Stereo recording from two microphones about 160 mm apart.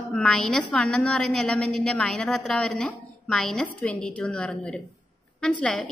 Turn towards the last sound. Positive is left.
turn(degrees=0)  # may be behind; listen again after turning